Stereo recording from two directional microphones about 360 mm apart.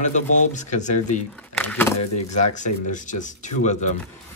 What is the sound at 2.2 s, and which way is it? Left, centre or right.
A man's voice, centre.